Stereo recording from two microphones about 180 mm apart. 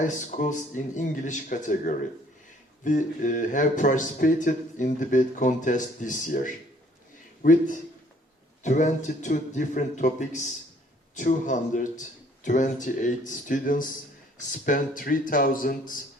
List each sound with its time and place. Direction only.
0.0 s speech: 45° left (ahead or behind)